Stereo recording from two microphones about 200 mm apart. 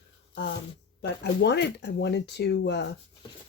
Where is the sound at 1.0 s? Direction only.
60° left (ahead or behind).